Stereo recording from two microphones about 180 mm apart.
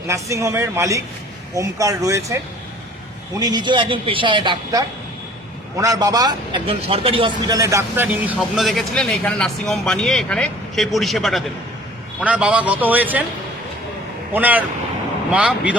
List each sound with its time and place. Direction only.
0.1 s a man's voice: 15° right (ahead or behind)
14.3 s a man's voice: 10° right (ahead or behind)